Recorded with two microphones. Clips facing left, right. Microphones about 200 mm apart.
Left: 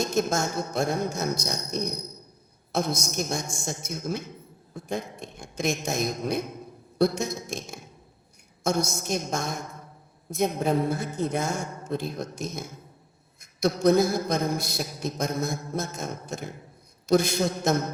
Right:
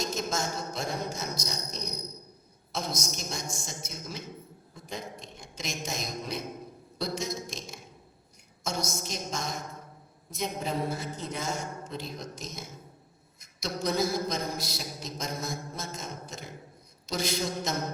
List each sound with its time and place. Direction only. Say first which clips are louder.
0.0 s a man's voice: left 6 dB; 55° left (ahead or behind)